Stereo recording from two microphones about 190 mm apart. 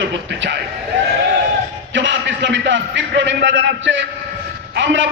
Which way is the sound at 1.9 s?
75° right (ahead or behind).